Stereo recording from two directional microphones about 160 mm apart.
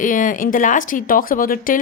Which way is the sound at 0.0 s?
55° left (ahead or behind).